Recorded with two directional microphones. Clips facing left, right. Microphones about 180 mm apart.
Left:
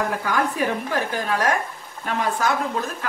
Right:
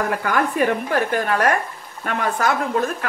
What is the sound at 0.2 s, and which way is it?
Speech, 60° right (ahead or behind).